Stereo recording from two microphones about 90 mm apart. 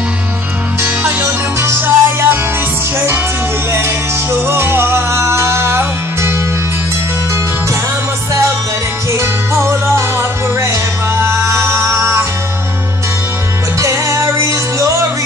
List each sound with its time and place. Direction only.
0.8 s music: 25° right (ahead or behind)
3.7 s music: 25° right (ahead or behind)
9.1 s music: 30° right (ahead or behind)
13.7 s music: 30° right (ahead or behind)